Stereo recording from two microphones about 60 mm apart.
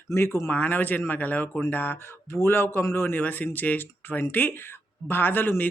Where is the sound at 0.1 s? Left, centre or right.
Left.